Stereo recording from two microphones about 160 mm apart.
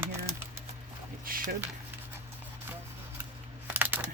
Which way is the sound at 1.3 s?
65° right (ahead or behind).